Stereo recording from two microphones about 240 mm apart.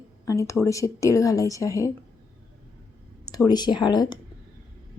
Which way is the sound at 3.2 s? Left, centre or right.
Centre.